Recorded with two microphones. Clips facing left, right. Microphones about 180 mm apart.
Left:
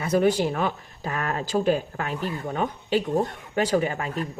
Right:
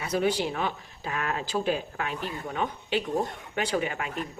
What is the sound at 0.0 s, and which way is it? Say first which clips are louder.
Speech: left 5 dB; 50° left (ahead or behind).